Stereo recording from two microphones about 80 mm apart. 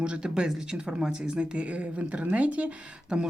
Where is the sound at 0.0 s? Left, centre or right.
Centre.